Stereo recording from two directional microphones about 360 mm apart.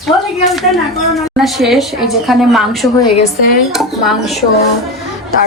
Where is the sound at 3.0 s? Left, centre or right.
Centre.